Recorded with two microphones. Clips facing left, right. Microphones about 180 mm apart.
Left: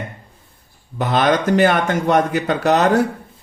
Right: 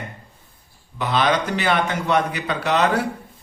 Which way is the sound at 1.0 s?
45° left (ahead or behind).